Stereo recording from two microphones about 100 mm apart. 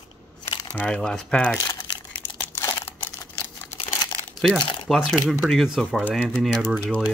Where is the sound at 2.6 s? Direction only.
25° left (ahead or behind).